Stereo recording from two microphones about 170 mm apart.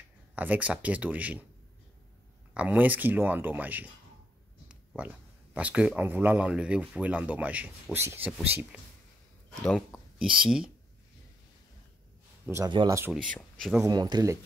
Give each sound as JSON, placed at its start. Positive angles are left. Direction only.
{"t": 0.3, "sound": "speech", "side_deg": -10}
{"t": 2.5, "sound": "speech", "side_deg": -5}
{"t": 12.6, "sound": "speech", "side_deg": -25}
{"t": 13.3, "sound": "speech", "side_deg": 0}
{"t": 13.8, "sound": "speech", "side_deg": -25}